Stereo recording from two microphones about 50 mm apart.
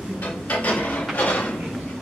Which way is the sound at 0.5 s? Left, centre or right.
Left.